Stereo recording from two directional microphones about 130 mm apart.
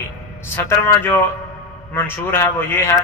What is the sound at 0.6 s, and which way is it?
Speech, 15° left (ahead or behind).